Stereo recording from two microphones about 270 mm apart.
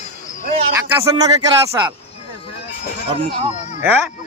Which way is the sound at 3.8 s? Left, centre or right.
Centre.